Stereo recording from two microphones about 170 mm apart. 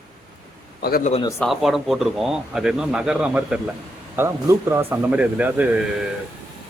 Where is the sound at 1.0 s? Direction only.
40° left (ahead or behind).